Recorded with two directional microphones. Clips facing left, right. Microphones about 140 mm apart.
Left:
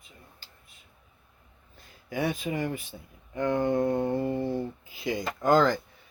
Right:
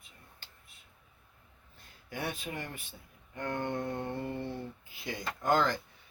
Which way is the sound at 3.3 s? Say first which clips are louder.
Left 9 dB; 90° left.